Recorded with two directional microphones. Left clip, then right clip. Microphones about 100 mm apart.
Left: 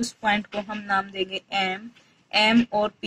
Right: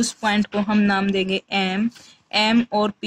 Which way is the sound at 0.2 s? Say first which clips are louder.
Even; 40° right (ahead or behind).